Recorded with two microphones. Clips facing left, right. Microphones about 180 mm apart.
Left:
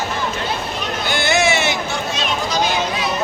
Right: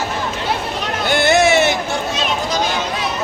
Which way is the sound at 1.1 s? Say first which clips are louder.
Right 5 dB; 60° right (ahead or behind).